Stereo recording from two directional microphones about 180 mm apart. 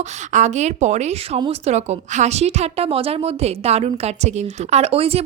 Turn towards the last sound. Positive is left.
turn(degrees=-35)  # may be behind; listen again after turning